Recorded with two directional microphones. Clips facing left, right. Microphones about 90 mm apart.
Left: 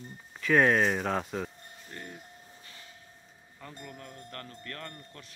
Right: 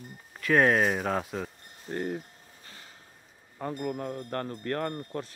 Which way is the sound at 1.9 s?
45° right (ahead or behind).